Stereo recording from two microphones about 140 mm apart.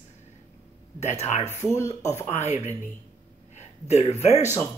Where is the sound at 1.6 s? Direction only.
20° left (ahead or behind).